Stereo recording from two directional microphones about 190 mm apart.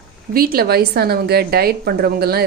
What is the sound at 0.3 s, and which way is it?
A woman's voice, 50° right (ahead or behind).